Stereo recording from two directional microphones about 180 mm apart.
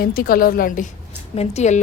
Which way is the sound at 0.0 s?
55° left (ahead or behind).